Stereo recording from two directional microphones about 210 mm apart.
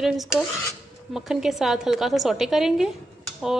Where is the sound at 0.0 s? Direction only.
Centre (ahead or behind).